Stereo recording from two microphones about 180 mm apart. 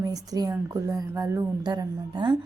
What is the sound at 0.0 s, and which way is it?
A woman's voice, 20° right (ahead or behind).